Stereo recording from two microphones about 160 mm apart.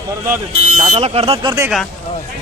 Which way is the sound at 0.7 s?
40° right (ahead or behind).